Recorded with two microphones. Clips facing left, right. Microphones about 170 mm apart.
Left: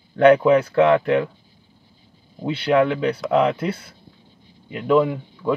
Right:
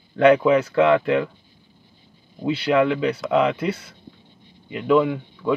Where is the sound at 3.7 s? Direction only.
55° left (ahead or behind).